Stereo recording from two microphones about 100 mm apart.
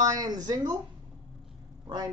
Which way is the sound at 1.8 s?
40° right (ahead or behind).